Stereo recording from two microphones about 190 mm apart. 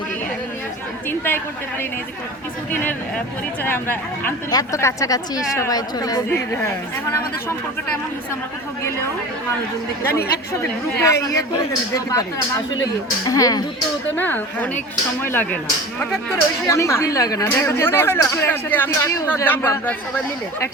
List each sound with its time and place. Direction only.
3.6 s speech: 10° left (ahead or behind)
10.1 s speech: 10° left (ahead or behind)